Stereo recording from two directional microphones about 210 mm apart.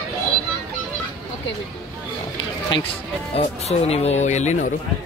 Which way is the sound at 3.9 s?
30° left (ahead or behind).